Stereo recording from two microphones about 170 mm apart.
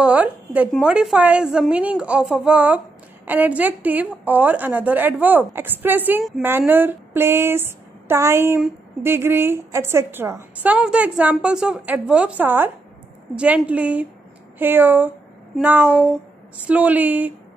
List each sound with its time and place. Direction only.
0.0 s speech: 10° right (ahead or behind)